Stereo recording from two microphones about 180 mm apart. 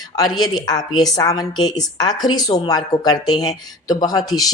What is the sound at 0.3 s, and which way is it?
Speech, 25° left (ahead or behind).